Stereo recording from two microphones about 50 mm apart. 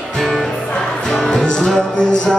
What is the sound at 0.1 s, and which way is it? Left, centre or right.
Music, centre.